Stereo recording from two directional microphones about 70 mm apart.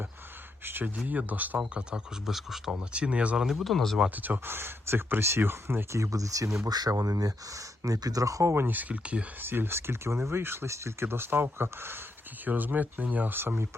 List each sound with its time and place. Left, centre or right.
0.6 s speech: right
1.5 s speech: centre
2.7 s speech: centre
3.6 s speech: centre
4.1 s speech: right
6.0 s speech: right
6.7 s speech: right
8.5 s speech: right
9.4 s speech: right